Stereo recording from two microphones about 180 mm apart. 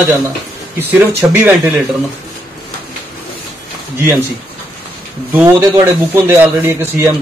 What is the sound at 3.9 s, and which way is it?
Speech, 15° right (ahead or behind).